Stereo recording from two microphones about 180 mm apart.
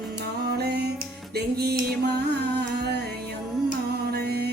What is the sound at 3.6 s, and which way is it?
Music, 60° right (ahead or behind).